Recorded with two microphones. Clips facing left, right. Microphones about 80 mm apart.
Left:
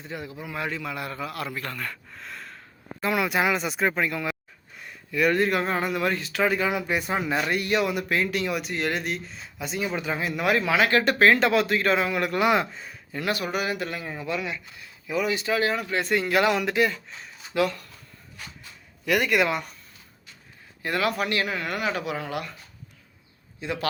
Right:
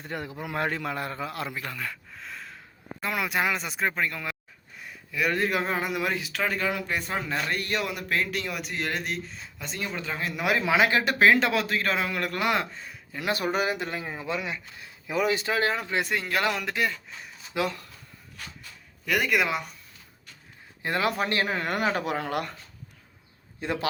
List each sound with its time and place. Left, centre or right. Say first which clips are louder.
0.0 s a man's voice: right 1 dB; right
1.5 s a man's voice: left 1 dB; centre
6.4 s speech: left 5 dB; centre
10.2 s a man's voice: left 2 dB; centre
10.7 s speech: right 1 dB; centre
11.0 s a man's voice: left 2 dB; centre
13.3 s speech: right 3 dB; right
16.0 s a man's voice: left 9 dB; centre
17.5 s speech: left 4 dB; right
19.0 s a man's voice: left 3 dB; centre
20.8 s speech: left 1 dB; right
23.6 s a man's voice: right 1 dB; right